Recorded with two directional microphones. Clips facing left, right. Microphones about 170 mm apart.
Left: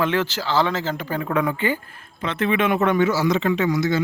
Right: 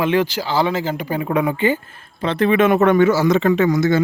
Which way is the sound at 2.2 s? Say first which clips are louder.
Right 6 dB; 35° right (ahead or behind).